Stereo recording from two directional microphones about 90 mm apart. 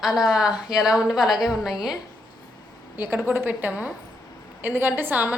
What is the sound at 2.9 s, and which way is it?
A woman's voice, 25° right (ahead or behind).